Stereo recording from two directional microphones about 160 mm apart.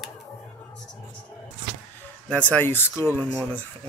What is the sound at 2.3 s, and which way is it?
Speech, 10° left (ahead or behind).